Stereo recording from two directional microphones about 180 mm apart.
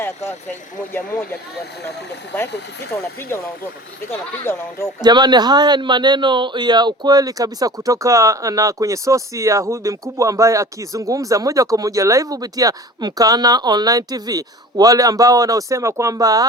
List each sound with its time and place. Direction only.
0.9 s speech: 10° left (ahead or behind)
2.9 s speech: 15° left (ahead or behind)
5.0 s speech: 25° right (ahead or behind)